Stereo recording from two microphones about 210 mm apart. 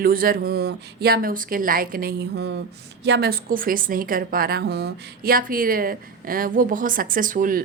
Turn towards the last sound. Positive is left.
turn(degrees=-40)  # may be behind; listen again after turning